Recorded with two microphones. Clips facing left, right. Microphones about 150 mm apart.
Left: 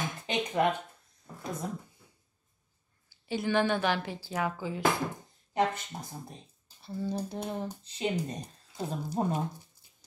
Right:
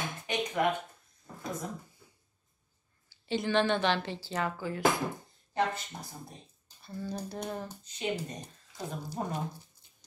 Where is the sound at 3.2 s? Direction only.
10° left (ahead or behind).